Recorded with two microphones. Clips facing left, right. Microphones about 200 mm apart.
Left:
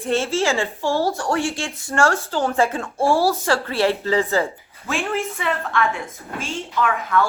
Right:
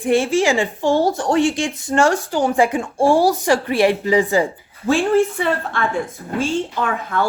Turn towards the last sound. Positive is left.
turn(degrees=-30)  # may be behind; listen again after turning